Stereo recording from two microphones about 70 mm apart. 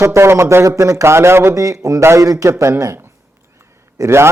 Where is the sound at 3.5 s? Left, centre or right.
Right.